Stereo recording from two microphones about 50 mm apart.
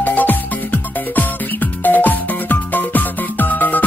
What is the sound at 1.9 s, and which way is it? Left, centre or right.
Music, left.